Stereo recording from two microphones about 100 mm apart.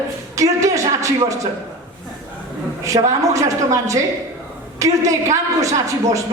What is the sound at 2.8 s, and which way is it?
A woman's voice, 30° right (ahead or behind).